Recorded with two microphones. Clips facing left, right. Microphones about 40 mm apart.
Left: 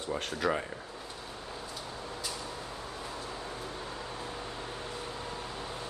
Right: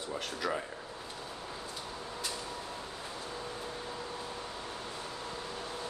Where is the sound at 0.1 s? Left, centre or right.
Centre.